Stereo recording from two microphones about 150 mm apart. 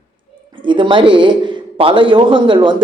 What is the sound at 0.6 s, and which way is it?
A man's voice, 35° right (ahead or behind).